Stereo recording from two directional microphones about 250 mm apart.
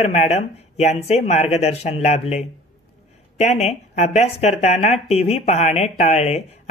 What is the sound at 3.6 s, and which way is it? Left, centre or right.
Speech, left.